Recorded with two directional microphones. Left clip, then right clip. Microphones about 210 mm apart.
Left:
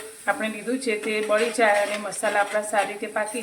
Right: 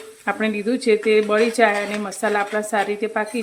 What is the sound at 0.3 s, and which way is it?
Speech, 50° right (ahead or behind).